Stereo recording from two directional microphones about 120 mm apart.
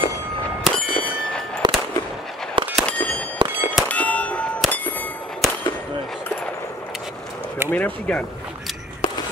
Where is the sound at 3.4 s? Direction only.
40° right (ahead or behind).